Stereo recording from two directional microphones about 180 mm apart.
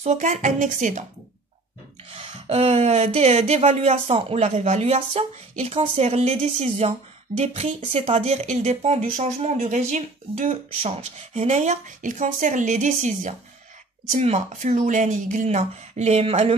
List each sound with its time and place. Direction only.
0.0 s a woman's voice: 40° right (ahead or behind)
2.1 s speech: 35° right (ahead or behind)